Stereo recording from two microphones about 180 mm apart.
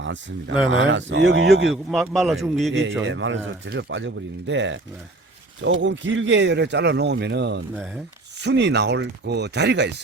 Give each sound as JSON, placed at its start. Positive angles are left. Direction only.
{"t": 0.0, "sound": "speech", "side_deg": -90}
{"t": 1.7, "sound": "a man's voice", "side_deg": 0}
{"t": 3.1, "sound": "speech", "side_deg": -90}
{"t": 5.8, "sound": "a man's voice", "side_deg": -90}